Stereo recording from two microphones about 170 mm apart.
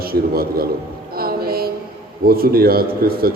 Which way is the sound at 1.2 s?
65° right (ahead or behind).